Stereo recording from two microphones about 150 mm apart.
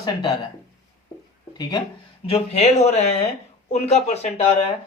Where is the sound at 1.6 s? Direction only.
30° left (ahead or behind).